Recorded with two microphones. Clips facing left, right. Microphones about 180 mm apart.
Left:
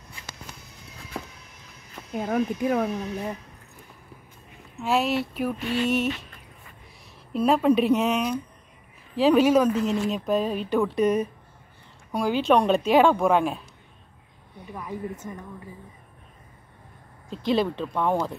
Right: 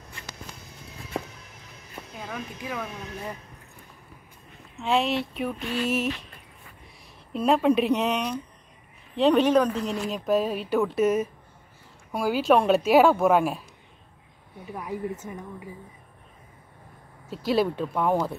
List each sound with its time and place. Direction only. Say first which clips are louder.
2.1 s speech: left 12 dB; 45° left (ahead or behind)
4.7 s speech: left 1 dB; 5° left (ahead or behind)
7.3 s speech: left 1 dB; centre (ahead or behind)
14.7 s speech: right 2 dB; 10° right (ahead or behind)
17.3 s speech: even; 5° right (ahead or behind)